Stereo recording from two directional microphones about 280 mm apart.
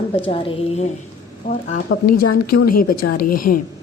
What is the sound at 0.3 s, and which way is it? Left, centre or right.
A woman's voice, left.